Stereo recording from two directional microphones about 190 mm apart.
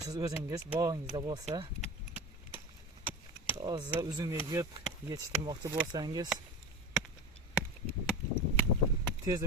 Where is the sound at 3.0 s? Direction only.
10° right (ahead or behind).